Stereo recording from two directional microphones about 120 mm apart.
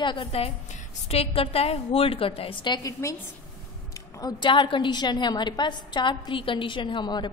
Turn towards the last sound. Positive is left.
turn(degrees=40)  # may be behind; listen again after turning